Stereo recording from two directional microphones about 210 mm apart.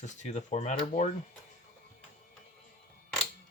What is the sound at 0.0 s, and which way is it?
Speech, 30° left (ahead or behind).